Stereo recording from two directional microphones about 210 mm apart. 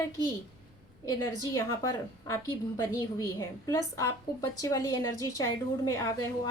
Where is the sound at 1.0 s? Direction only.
15° left (ahead or behind).